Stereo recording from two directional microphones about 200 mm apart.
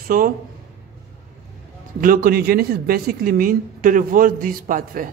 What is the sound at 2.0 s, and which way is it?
A man's voice, 45° right (ahead or behind).